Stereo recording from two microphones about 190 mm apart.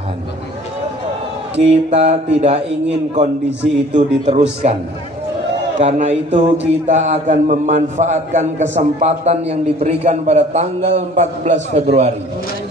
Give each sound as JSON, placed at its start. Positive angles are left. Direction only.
{"t": 1.6, "sound": "a man's voice", "side_deg": -35}
{"t": 5.8, "sound": "a man's voice", "side_deg": -35}